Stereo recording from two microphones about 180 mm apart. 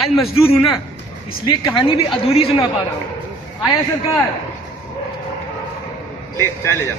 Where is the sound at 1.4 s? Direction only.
20° left (ahead or behind).